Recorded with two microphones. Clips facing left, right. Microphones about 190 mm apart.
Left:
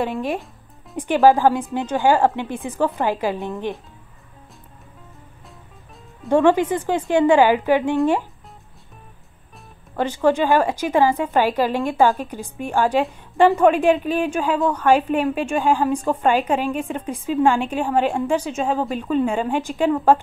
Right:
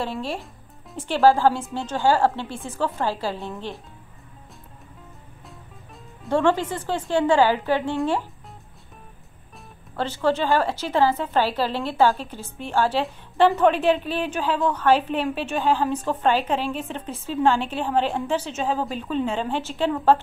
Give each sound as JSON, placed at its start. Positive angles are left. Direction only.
{"t": 0.0, "sound": "a woman's voice", "side_deg": 15}
{"t": 6.2, "sound": "a woman's voice", "side_deg": 15}
{"t": 9.9, "sound": "a woman's voice", "side_deg": 15}